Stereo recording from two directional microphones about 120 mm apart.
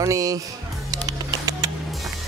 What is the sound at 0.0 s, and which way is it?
Speech, 25° right (ahead or behind).